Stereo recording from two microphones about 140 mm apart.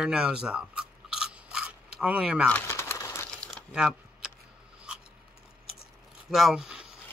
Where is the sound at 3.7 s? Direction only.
5° right (ahead or behind).